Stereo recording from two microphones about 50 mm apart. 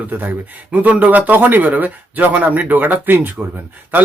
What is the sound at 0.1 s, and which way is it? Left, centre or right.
Speech, right.